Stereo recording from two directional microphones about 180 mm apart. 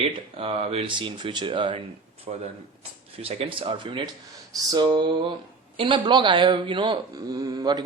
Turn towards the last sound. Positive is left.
turn(degrees=-20)  # may be behind; listen again after turning